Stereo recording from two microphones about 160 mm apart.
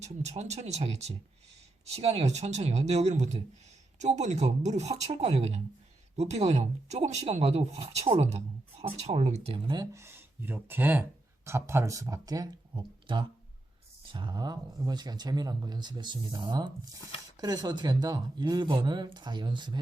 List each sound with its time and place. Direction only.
0.0 s speech: 45° right (ahead or behind)
9.7 s speech: 20° right (ahead or behind)